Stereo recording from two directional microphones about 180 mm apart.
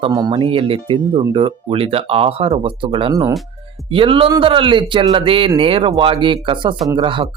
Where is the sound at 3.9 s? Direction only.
30° right (ahead or behind).